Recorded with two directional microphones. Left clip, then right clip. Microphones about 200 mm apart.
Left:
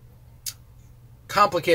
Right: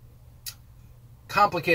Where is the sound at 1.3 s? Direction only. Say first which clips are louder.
Left 2 dB; 5° left (ahead or behind).